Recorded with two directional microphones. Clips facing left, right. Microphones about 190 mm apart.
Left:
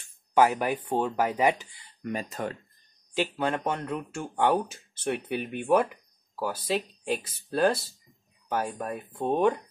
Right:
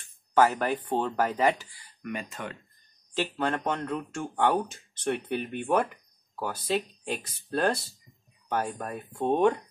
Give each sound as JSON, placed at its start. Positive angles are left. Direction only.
{"t": 0.0, "sound": "speech", "side_deg": 10}
{"t": 2.1, "sound": "speech", "side_deg": 40}
{"t": 3.2, "sound": "speech", "side_deg": 10}
{"t": 7.1, "sound": "speech", "side_deg": 5}